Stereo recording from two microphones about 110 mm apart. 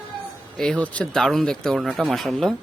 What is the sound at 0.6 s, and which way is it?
Speech, 5° left (ahead or behind).